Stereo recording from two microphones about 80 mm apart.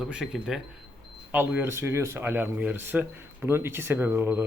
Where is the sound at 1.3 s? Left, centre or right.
Right.